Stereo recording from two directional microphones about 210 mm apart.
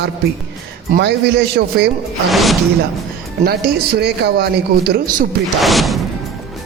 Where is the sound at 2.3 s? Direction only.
Centre (ahead or behind).